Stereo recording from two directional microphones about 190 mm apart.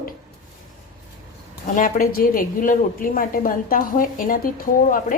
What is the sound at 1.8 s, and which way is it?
A woman's voice, 45° left (ahead or behind).